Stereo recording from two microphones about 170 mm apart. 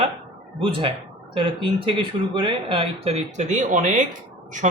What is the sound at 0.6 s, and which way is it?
Speech, 30° right (ahead or behind).